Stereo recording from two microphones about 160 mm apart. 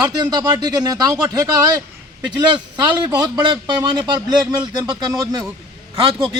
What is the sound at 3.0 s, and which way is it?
A man's voice, 25° right (ahead or behind).